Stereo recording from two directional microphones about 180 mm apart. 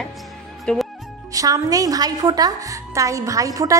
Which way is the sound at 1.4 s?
20° right (ahead or behind).